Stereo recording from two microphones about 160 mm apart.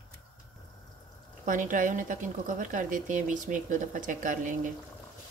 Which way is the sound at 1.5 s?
55° right (ahead or behind).